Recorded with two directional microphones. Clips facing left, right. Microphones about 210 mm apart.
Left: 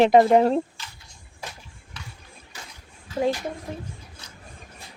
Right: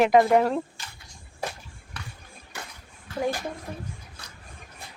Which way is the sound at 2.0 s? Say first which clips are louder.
Right 2 dB; 60° right (ahead or behind).